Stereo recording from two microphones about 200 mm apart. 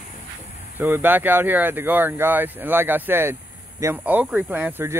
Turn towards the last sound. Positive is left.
turn(degrees=-10)  # may be behind; listen again after turning